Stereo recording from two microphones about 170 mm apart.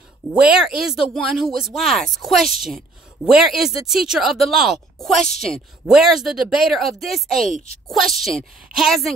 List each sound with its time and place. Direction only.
0.3 s speech: 5° right (ahead or behind)
7.3 s speech: 50° right (ahead or behind)
7.9 s speech: centre (ahead or behind)